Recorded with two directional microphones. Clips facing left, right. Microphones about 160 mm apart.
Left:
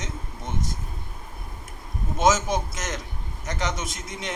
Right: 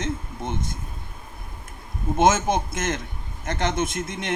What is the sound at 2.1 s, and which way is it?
A man's voice, 55° right (ahead or behind).